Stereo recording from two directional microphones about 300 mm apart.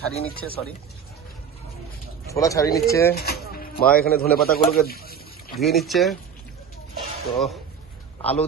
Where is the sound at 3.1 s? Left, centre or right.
Left.